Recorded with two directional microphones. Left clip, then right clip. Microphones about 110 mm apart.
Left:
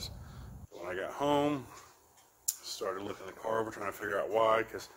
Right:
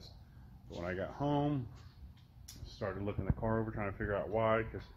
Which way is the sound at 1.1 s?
40° left (ahead or behind).